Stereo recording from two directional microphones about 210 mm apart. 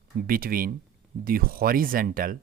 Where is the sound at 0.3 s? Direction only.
45° right (ahead or behind).